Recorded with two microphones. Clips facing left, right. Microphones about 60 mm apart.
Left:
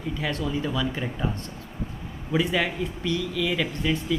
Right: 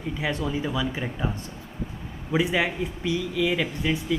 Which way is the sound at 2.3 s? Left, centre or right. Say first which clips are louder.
Right 1 dB; centre.